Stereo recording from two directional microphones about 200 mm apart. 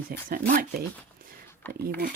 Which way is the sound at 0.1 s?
45° right (ahead or behind).